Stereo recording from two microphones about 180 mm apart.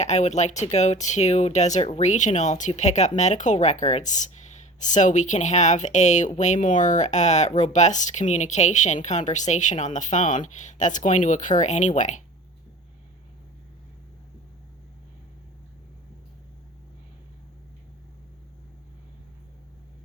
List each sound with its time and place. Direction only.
0.0 s speech: 40° left (ahead or behind)